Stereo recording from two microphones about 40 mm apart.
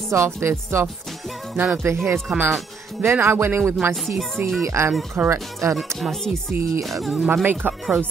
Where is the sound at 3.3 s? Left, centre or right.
Right.